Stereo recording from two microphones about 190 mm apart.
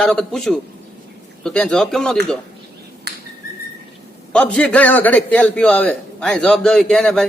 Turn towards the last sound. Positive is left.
turn(degrees=5)  # may be behind; listen again after turning